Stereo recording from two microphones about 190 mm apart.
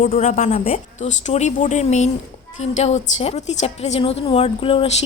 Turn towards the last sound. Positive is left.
turn(degrees=30)  # may be behind; listen again after turning